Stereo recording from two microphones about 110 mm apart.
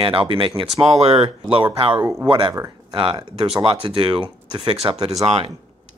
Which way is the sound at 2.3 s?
45° right (ahead or behind).